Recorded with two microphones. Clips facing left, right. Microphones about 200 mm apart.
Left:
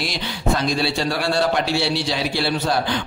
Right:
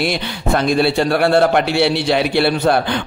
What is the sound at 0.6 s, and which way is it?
Music, 55° right (ahead or behind).